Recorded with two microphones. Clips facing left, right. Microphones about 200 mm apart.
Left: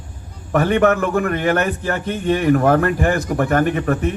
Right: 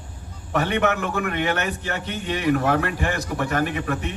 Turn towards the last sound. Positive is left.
turn(degrees=45)  # may be behind; listen again after turning